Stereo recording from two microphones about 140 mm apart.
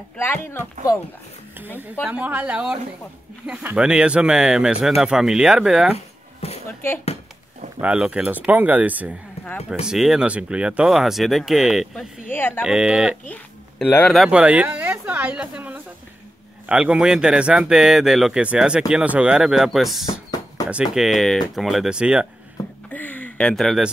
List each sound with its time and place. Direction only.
0.2 s speech: 15° left (ahead or behind)
2.0 s speech: 10° right (ahead or behind)
6.4 s a sound: 45° left (ahead or behind)
7.8 s speech: 10° right (ahead or behind)
12.3 s speech: 15° left (ahead or behind)
12.6 s speech: 5° right (ahead or behind)
13.3 s speech: 10° left (ahead or behind)
14.2 s a woman's voice: 10° right (ahead or behind)
22.8 s a sound: 10° left (ahead or behind)